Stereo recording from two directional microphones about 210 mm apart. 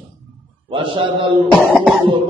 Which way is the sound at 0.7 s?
25° right (ahead or behind).